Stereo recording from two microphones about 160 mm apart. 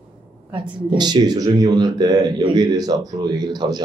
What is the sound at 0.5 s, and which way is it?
Speech, 30° right (ahead or behind).